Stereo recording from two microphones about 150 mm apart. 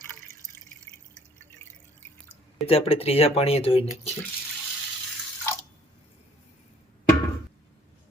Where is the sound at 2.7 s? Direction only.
40° left (ahead or behind).